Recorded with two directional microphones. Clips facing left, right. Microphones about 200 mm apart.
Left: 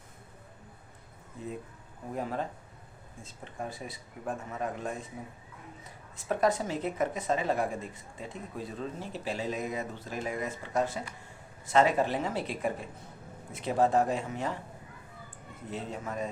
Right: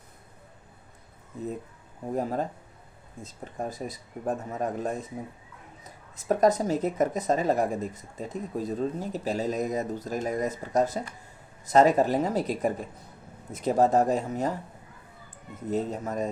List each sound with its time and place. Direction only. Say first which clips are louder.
2.1 s speech: right 5 dB; 40° right (ahead or behind)
6.1 s speech: right 5 dB; 40° right (ahead or behind)
15.7 s speech: right 8 dB; 40° right (ahead or behind)